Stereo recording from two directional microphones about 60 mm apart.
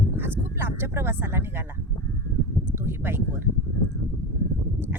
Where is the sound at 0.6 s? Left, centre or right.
Right.